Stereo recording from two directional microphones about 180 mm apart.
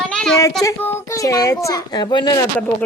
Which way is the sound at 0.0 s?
5° left (ahead or behind).